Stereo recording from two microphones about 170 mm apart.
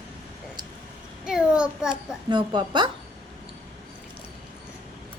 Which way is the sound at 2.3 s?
25° right (ahead or behind).